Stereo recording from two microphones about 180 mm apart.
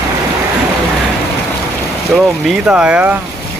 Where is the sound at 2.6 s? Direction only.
5° right (ahead or behind).